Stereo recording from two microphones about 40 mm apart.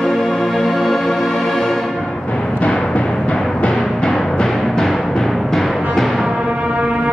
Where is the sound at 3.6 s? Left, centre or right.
Left.